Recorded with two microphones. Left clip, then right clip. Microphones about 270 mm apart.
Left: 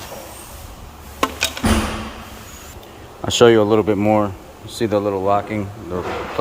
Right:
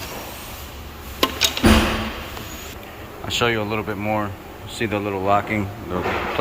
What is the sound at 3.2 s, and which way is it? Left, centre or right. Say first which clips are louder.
Speech: left 9 dB; left.